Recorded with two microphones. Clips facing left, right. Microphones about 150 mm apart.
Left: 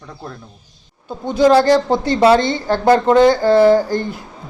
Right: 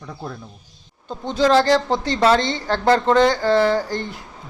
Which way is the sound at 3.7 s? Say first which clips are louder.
Left 7 dB; 45° left (ahead or behind).